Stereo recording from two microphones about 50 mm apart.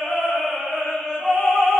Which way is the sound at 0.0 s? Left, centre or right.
Centre.